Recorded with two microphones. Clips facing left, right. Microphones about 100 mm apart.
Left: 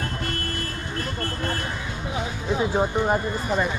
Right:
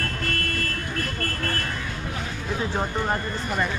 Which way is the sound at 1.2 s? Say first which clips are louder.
Left 2 dB; 20° left (ahead or behind).